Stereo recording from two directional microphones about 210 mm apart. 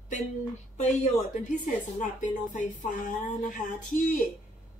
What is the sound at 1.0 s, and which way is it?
A woman's voice, 35° left (ahead or behind).